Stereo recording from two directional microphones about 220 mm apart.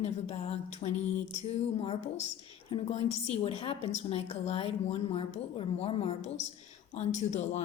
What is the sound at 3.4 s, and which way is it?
A woman's voice, 25° left (ahead or behind).